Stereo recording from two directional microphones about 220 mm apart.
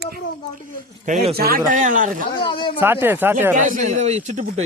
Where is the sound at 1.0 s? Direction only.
30° right (ahead or behind).